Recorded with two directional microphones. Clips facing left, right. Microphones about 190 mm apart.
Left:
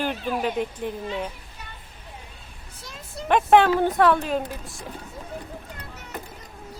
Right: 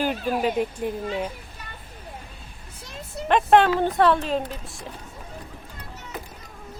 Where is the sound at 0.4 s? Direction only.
5° right (ahead or behind).